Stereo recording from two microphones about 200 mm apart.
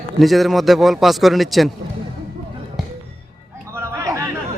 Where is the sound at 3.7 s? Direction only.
15° right (ahead or behind).